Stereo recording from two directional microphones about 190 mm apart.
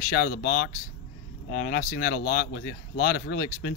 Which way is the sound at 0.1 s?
55° left (ahead or behind).